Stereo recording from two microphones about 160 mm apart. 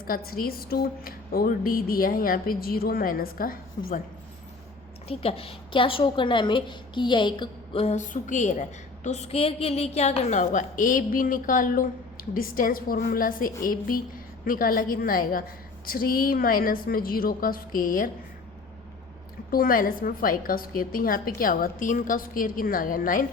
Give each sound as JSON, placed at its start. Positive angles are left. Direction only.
{"t": 0.0, "sound": "a woman's voice", "side_deg": 65}
{"t": 5.0, "sound": "a woman's voice", "side_deg": 35}
{"t": 19.5, "sound": "a woman's voice", "side_deg": 65}